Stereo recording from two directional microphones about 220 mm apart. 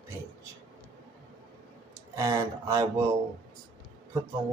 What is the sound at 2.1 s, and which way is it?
Speech, 15° right (ahead or behind).